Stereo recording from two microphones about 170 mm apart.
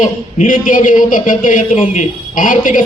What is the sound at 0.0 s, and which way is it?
Speech, 55° left (ahead or behind).